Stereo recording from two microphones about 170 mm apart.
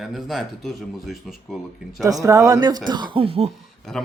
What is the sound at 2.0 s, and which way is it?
Speech, 20° right (ahead or behind).